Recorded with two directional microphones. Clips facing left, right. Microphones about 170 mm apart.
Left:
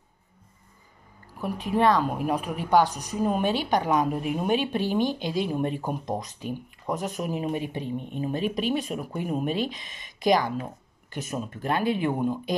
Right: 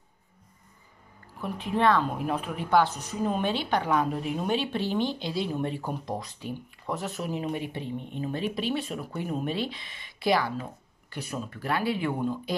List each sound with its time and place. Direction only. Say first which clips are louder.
1.4 s a woman's voice: left 2 dB; 10° left (ahead or behind)